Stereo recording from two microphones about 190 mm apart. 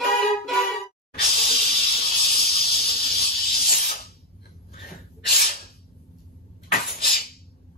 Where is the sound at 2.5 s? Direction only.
55° left (ahead or behind).